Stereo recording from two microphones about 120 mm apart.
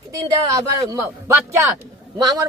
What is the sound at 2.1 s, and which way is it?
Speech, 30° right (ahead or behind).